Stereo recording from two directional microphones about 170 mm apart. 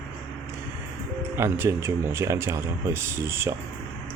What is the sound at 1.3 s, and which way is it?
Speech, 15° right (ahead or behind).